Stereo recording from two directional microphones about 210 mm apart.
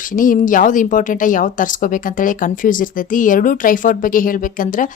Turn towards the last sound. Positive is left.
turn(degrees=40)  # may be behind; listen again after turning